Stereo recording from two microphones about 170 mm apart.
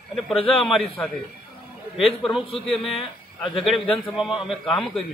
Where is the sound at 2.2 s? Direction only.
Centre (ahead or behind).